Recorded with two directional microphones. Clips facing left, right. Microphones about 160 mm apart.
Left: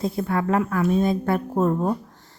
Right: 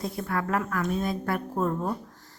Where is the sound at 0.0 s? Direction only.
25° left (ahead or behind).